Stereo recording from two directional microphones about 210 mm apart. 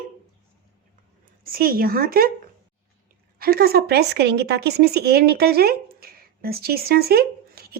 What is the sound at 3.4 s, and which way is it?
A woman's voice, 45° right (ahead or behind).